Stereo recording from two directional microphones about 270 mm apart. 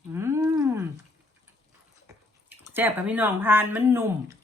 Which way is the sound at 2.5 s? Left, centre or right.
Centre.